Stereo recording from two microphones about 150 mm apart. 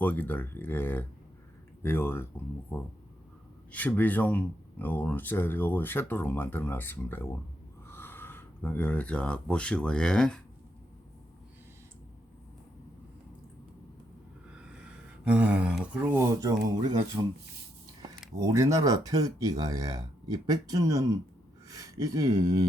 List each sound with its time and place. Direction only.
0.0 s speech: 10° left (ahead or behind)
14.5 s speech: 5° right (ahead or behind); by 16.9 s 25° right (ahead or behind)
18.3 s speech: 20° right (ahead or behind)